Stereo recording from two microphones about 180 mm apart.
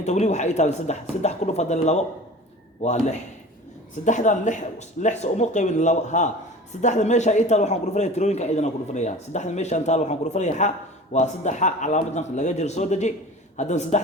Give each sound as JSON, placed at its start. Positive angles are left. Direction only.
{"t": 0.0, "sound": "a man's voice", "side_deg": 40}